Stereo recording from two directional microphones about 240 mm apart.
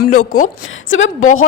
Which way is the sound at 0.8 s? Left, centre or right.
Left.